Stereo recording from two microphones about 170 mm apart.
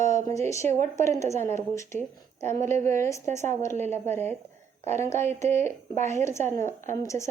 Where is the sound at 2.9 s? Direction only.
15° left (ahead or behind).